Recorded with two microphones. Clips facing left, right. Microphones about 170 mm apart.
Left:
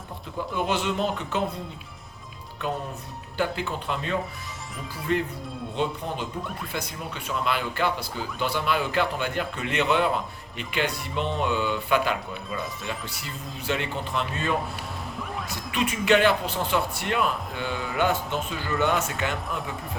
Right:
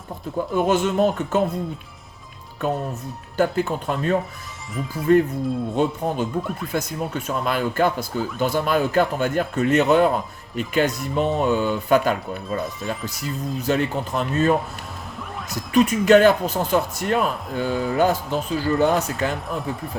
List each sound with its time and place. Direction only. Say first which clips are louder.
0.5 s speech: right 7 dB; 45° right (ahead or behind)
2.6 s speech: right 6 dB; 45° right (ahead or behind)
4.7 s speech: right 11 dB; centre (ahead or behind)
5.7 s speech: right 4 dB; 45° right (ahead or behind)
13.6 s speech: right 6 dB; 40° right (ahead or behind)
15.5 s speech: right 11 dB; 40° right (ahead or behind)
19.3 s speech: right 4 dB; centre (ahead or behind)